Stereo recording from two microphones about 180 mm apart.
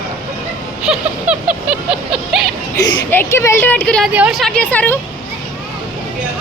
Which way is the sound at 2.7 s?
20° left (ahead or behind).